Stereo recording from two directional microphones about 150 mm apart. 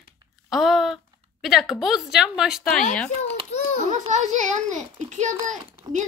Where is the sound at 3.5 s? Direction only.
45° left (ahead or behind).